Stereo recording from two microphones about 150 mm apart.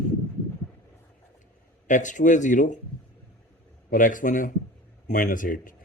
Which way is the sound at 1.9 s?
55° left (ahead or behind).